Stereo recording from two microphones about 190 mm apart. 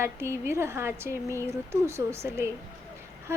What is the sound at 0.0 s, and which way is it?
A woman's voice, 15° right (ahead or behind).